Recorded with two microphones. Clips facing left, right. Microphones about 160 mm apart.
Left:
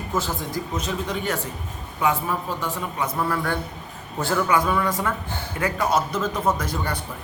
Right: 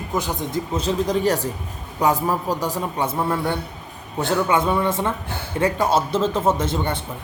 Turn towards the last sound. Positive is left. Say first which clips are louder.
# right 4 dB
turn(degrees=-25)  # may be behind; listen again after turning